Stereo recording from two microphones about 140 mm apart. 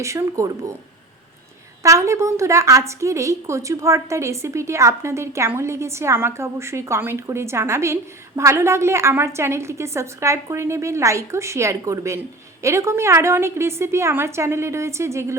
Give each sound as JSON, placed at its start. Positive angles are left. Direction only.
{"t": 0.0, "sound": "a woman's voice", "side_deg": -20}
{"t": 1.8, "sound": "a woman's voice", "side_deg": -20}